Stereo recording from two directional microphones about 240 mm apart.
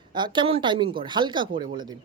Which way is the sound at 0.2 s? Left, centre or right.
Right.